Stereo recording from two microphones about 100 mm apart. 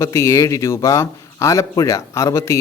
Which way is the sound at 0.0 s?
30° left (ahead or behind).